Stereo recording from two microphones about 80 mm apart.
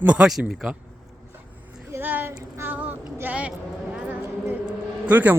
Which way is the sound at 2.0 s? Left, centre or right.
Right.